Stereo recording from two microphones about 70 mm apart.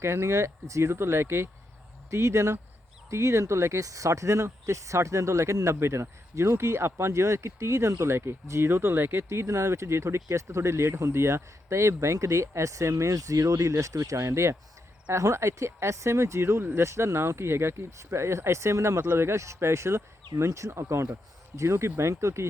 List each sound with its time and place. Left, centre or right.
0.0 s speech: right
10.2 s speech: right
10.5 s speech: right